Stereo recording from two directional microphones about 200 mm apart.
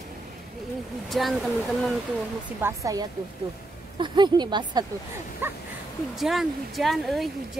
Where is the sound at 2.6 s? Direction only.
15° right (ahead or behind).